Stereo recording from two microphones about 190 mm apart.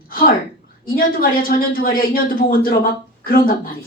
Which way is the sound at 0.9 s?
50° left (ahead or behind).